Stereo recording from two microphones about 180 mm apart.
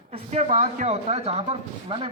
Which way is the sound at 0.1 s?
40° right (ahead or behind).